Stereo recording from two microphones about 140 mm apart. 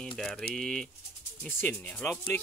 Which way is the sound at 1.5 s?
15° left (ahead or behind).